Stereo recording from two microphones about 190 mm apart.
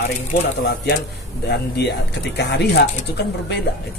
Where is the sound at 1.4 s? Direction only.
60° left (ahead or behind).